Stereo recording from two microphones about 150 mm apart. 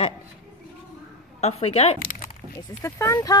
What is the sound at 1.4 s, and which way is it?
Speech, 45° left (ahead or behind).